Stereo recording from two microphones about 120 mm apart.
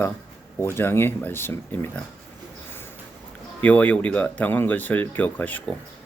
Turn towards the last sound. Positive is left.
turn(degrees=15)  # may be behind; listen again after turning